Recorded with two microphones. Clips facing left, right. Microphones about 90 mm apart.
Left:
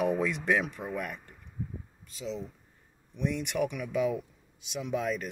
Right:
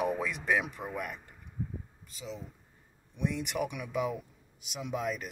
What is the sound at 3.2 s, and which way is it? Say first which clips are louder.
Speech: left 3 dB; 10° right (ahead or behind).